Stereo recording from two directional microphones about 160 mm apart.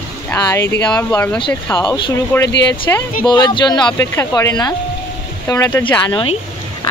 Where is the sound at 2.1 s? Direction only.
20° left (ahead or behind).